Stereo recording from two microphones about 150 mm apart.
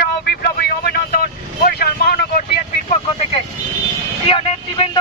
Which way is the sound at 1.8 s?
90° left.